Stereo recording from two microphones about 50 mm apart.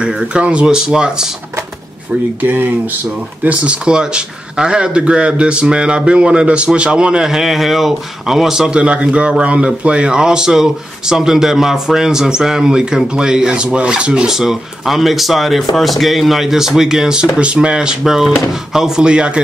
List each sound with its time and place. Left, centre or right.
0.0 s speech: right
2.4 s speech: right
3.4 s speech: right
7.2 s speech: centre
14.3 s speech: centre